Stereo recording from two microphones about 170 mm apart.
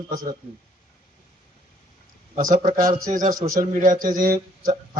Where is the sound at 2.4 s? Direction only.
55° right (ahead or behind).